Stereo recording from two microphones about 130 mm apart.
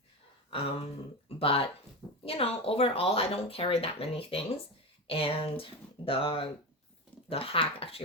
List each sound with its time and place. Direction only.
1.4 s speech: 45° left (ahead or behind)